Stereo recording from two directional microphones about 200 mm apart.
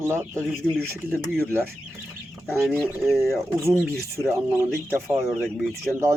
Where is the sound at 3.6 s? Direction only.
15° right (ahead or behind).